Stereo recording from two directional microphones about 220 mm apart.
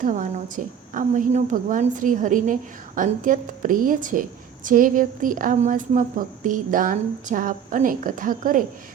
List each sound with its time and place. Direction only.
0.0 s a woman's voice: 35° right (ahead or behind)